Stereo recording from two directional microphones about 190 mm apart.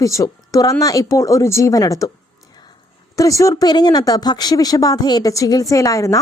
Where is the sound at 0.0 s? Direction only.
15° left (ahead or behind).